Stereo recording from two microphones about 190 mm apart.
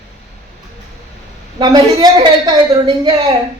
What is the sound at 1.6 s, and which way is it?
A woman's voice, 25° right (ahead or behind).